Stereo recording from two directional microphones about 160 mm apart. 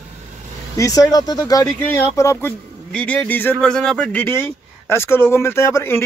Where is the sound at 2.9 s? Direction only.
5° left (ahead or behind).